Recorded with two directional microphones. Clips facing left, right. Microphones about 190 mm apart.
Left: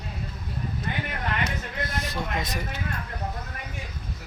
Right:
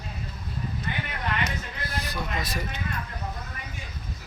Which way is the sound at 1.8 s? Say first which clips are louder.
Left 3 dB; 20° left (ahead or behind).